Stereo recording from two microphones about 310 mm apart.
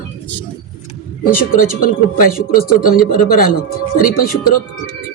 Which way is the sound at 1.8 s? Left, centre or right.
Left.